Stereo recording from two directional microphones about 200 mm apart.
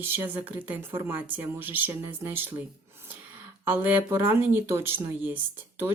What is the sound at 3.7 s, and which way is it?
Speech, 10° right (ahead or behind).